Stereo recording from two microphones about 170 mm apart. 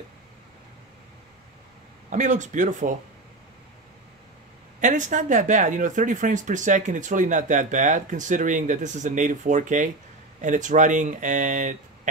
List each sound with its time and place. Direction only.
2.0 s speech: 45° right (ahead or behind)
4.7 s speech: 50° right (ahead or behind)